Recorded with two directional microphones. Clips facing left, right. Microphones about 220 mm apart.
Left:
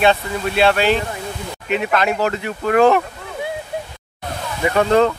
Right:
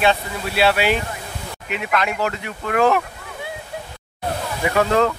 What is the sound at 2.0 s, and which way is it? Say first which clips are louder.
Speech: left 4 dB; 35° left (ahead or behind).